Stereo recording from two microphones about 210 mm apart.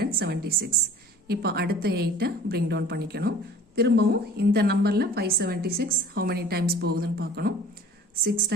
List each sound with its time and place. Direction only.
0.0 s a woman's voice: 50° right (ahead or behind)